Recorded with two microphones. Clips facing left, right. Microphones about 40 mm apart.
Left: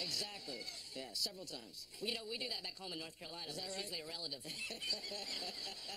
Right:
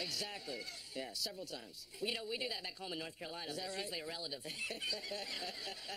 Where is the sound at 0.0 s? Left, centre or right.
Centre.